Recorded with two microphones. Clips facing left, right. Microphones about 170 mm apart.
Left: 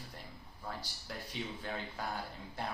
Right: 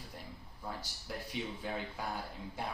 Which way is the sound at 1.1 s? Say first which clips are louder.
Right 2 dB; 5° right (ahead or behind).